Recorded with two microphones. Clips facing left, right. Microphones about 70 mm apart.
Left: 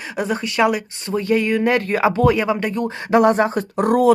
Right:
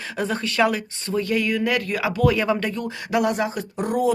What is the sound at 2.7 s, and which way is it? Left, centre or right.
Speech, left.